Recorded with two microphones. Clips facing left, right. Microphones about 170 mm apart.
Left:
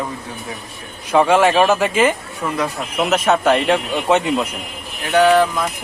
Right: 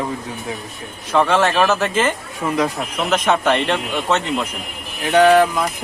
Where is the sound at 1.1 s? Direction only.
10° left (ahead or behind).